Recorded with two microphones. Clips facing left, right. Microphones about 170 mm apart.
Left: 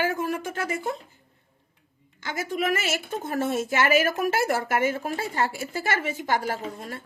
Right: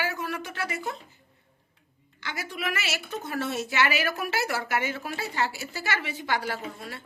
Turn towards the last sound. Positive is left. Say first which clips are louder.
# left 3 dB
turn(degrees=45)  # may be behind; listen again after turning